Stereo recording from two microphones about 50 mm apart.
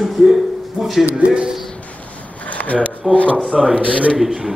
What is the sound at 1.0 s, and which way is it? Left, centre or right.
Speech, right.